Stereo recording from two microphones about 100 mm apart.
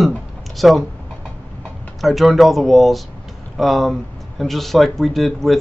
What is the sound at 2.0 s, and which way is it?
Speech, centre (ahead or behind).